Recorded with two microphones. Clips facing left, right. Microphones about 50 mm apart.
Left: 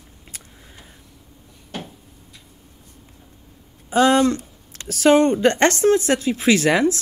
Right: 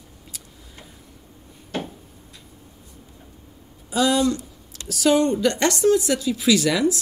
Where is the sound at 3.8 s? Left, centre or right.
Left.